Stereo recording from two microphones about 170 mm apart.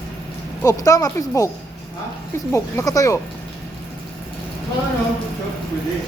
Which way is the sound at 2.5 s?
20° left (ahead or behind).